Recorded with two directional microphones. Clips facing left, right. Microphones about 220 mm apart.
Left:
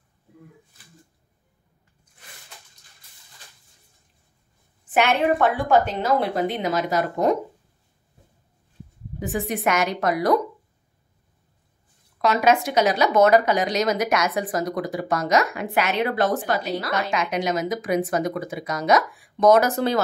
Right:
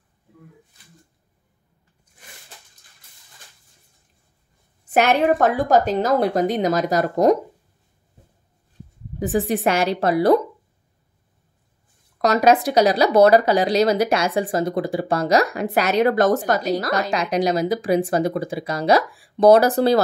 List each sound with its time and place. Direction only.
4.8 s speech: 40° right (ahead or behind)
9.2 s speech: 35° right (ahead or behind)
12.2 s speech: 40° right (ahead or behind)